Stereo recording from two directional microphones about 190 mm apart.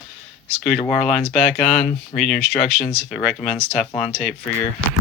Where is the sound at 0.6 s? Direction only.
Centre (ahead or behind).